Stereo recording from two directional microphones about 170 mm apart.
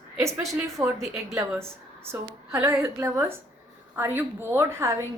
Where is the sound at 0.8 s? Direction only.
5° right (ahead or behind).